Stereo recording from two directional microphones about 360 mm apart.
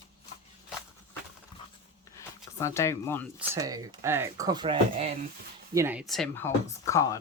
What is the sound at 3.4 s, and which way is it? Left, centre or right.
Speech, centre.